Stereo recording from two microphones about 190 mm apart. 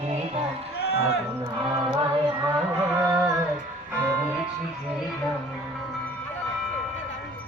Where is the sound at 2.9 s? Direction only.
15° right (ahead or behind).